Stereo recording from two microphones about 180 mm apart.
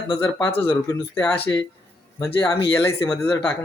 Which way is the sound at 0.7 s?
15° left (ahead or behind).